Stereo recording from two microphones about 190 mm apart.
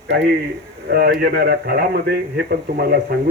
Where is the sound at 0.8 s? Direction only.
55° right (ahead or behind).